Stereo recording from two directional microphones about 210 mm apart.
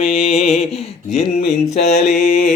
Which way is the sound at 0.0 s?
30° left (ahead or behind).